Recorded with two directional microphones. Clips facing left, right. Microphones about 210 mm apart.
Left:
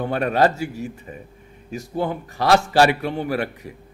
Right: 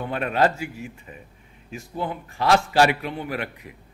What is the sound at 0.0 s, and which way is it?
A man's voice, 40° left (ahead or behind).